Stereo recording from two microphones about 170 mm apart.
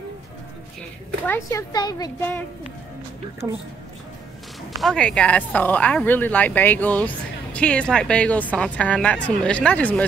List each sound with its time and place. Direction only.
1.2 s speech: 10° left (ahead or behind)
1.7 s speech: 25° left (ahead or behind)
2.1 s speech: 10° left (ahead or behind)
3.4 s speech: 10° right (ahead or behind)
4.7 s speech: 5° left (ahead or behind)